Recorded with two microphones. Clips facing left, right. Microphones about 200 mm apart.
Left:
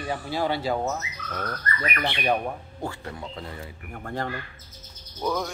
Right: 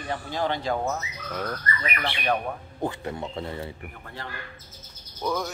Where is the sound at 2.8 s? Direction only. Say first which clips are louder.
Right 5 dB; 20° right (ahead or behind).